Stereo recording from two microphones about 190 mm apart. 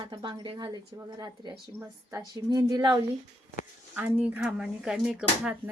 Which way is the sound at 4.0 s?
10° right (ahead or behind).